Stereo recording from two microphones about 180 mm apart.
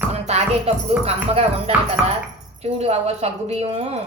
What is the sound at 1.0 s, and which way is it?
A woman's voice, 35° right (ahead or behind).